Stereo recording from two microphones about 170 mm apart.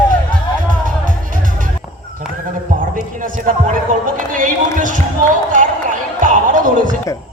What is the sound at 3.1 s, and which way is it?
Run, 50° right (ahead or behind).